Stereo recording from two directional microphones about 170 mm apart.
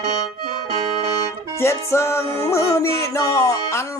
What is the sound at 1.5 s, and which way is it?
Music, 15° left (ahead or behind).